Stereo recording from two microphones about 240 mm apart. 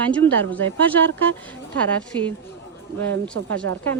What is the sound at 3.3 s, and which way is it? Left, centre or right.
Speech, right.